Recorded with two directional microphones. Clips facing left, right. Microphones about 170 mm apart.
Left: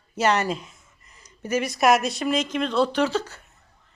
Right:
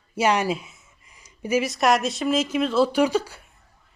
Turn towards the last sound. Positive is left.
turn(degrees=-10)  # may be behind; listen again after turning